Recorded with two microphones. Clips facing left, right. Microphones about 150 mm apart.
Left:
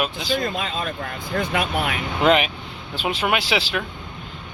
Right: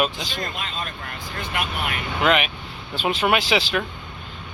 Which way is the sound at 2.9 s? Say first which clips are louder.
Right 2 dB; 10° left (ahead or behind).